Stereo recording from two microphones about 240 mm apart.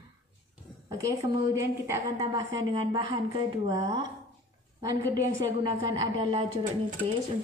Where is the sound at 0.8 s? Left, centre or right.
Centre.